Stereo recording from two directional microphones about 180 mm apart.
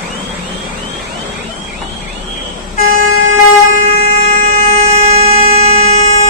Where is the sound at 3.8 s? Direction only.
35° right (ahead or behind).